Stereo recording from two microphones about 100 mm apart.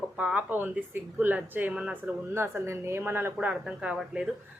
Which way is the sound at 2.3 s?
25° right (ahead or behind).